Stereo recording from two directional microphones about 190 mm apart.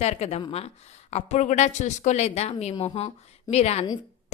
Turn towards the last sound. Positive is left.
turn(degrees=35)  # may be behind; listen again after turning